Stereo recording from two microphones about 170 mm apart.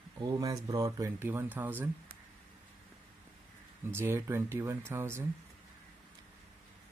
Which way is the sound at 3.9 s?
15° right (ahead or behind).